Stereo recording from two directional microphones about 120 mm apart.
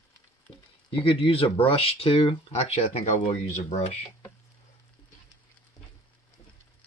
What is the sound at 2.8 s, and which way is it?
Speech, 80° left.